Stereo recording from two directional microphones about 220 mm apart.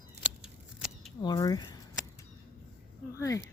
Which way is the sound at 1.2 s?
20° left (ahead or behind).